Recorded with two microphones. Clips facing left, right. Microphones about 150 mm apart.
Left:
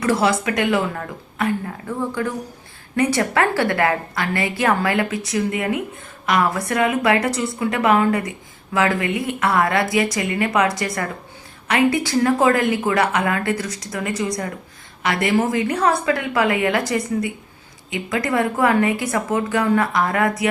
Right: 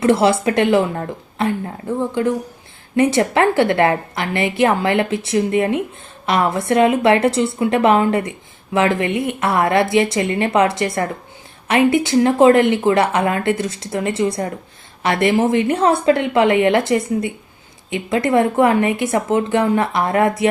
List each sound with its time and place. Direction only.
0.0 s a woman's voice: 25° right (ahead or behind)
2.9 s a woman's voice: 25° right (ahead or behind)